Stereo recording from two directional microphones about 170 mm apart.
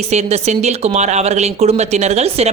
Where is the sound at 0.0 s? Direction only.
40° right (ahead or behind).